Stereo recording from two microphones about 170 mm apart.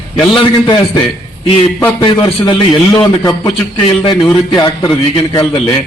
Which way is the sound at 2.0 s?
25° left (ahead or behind).